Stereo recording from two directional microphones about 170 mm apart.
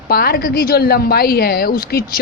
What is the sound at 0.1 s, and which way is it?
A woman's voice, 65° left (ahead or behind).